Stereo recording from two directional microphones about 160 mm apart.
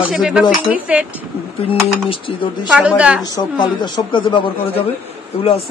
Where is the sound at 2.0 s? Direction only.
35° left (ahead or behind).